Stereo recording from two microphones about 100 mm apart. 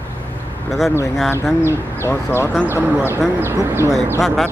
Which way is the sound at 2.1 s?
20° left (ahead or behind).